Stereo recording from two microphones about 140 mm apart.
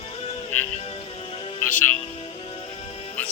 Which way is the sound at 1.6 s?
15° left (ahead or behind).